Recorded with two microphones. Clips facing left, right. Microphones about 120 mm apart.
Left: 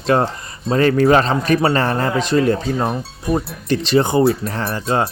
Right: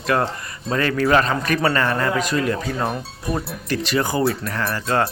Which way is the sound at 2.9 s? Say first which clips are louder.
Left 3 dB; centre (ahead or behind).